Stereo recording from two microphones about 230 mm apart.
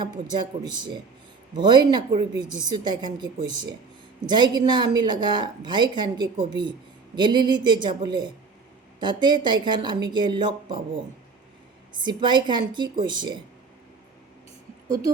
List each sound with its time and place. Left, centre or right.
0.0 s a woman's voice: centre
11.9 s a woman's voice: centre
14.8 s a woman's voice: centre